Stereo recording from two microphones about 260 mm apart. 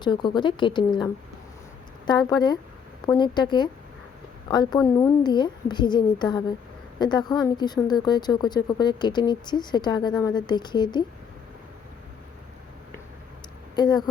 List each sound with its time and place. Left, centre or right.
0.0 s speech: centre
13.7 s speech: centre